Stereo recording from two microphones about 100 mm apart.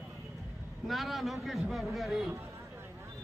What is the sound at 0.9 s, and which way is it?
A man's voice, centre (ahead or behind).